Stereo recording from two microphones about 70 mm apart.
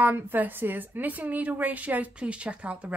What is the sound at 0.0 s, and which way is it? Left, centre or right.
A woman's voice, right.